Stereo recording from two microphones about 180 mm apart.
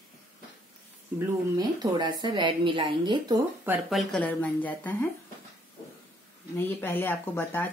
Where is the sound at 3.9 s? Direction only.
5° left (ahead or behind).